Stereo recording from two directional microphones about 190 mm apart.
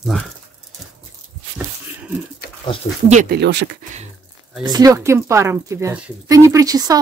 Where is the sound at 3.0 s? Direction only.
40° right (ahead or behind).